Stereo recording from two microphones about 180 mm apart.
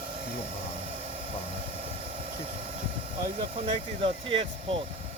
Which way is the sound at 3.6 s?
30° right (ahead or behind).